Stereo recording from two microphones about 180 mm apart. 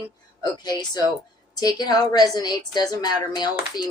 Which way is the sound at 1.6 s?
20° left (ahead or behind).